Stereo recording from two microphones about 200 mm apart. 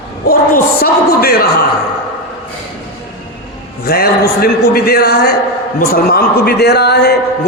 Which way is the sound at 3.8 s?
50° left (ahead or behind).